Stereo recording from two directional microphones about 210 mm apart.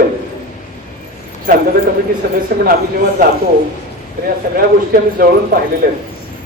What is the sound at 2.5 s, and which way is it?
Speech, 50° right (ahead or behind).